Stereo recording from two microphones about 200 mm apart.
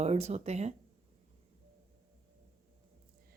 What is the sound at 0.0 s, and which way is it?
Speech, 35° right (ahead or behind).